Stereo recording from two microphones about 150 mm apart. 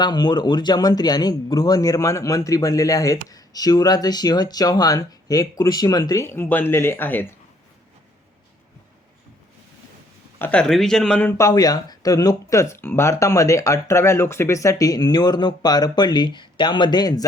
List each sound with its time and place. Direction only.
0.0 s speech: 30° left (ahead or behind); by 7.3 s 15° left (ahead or behind)
10.3 s speech: 10° left (ahead or behind)